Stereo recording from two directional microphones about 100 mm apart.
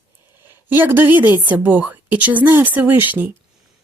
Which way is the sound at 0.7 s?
20° right (ahead or behind).